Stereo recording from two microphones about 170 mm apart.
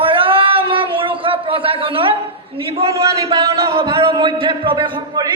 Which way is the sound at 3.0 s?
20° right (ahead or behind).